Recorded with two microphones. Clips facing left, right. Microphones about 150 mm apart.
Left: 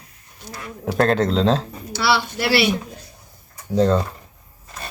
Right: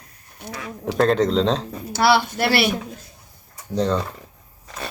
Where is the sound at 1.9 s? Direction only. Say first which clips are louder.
Right 3 dB; 50° right (ahead or behind).